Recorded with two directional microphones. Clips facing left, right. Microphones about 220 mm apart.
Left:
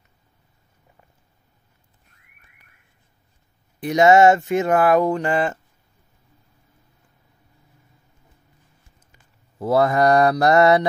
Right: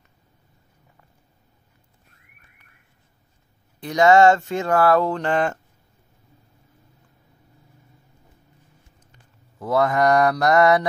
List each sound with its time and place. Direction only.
3.8 s speech: 20° left (ahead or behind)
9.6 s speech: 30° left (ahead or behind)